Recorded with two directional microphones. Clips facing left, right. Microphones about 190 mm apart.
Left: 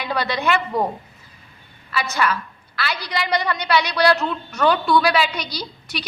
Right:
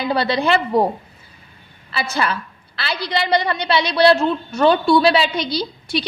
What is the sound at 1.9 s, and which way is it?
A woman's voice, 30° right (ahead or behind).